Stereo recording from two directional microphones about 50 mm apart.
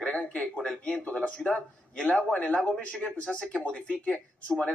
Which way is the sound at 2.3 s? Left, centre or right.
Left.